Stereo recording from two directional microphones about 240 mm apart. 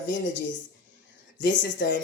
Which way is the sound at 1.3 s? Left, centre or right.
Left.